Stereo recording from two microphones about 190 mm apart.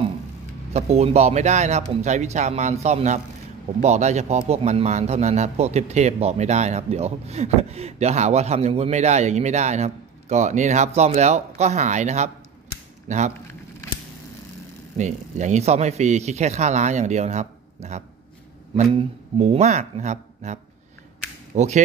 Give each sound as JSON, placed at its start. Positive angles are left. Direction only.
{"t": 0.7, "sound": "a man's voice", "side_deg": -35}
{"t": 15.0, "sound": "a man's voice", "side_deg": -40}
{"t": 21.5, "sound": "a man's voice", "side_deg": -40}